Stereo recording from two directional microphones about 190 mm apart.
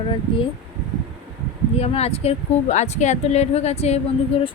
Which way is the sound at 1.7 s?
35° left (ahead or behind).